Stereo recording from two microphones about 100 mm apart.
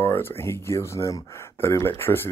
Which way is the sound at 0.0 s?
25° left (ahead or behind).